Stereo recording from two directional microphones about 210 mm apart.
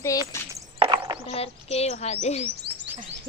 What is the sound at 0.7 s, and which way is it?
Clip-clop, 25° right (ahead or behind).